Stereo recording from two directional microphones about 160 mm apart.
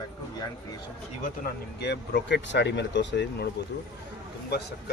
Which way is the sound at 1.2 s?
75° left (ahead or behind).